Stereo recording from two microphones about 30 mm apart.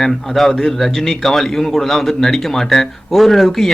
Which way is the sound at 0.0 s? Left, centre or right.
Centre.